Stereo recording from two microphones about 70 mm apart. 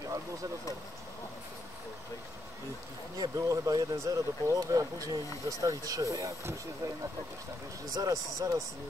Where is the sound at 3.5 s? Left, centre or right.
Right.